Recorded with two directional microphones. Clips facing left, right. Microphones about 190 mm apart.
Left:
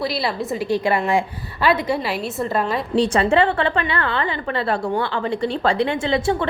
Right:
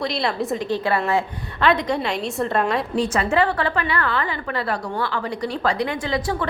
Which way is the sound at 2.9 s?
30° left (ahead or behind).